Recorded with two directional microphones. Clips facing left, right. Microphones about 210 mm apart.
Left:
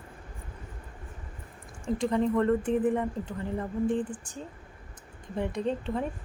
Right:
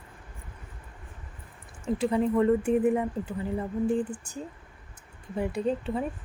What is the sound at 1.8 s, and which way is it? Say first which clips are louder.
A woman's voice: right 1 dB; 5° right (ahead or behind).